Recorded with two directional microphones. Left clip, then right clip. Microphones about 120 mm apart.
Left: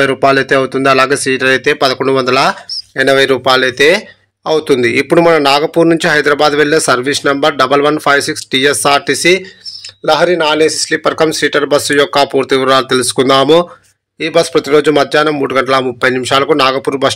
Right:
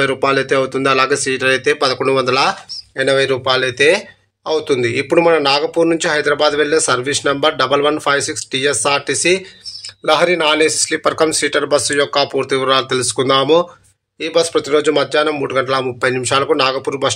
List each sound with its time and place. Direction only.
0.0 s speech: 30° left (ahead or behind)
3.0 s a man's voice: 40° left (ahead or behind)
10.0 s a man's voice: 20° left (ahead or behind); by 17.1 s 40° left (ahead or behind)